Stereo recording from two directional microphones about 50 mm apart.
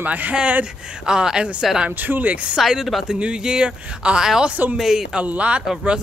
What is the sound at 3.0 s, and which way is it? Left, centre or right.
Speech, centre.